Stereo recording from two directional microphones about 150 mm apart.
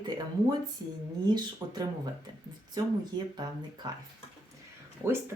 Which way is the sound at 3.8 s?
30° right (ahead or behind).